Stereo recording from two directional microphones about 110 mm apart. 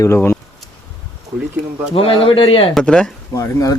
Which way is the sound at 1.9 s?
55° left (ahead or behind).